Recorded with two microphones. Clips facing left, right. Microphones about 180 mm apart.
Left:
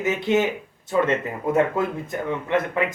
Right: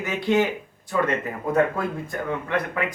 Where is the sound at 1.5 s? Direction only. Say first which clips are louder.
Left 1 dB; 20° left (ahead or behind).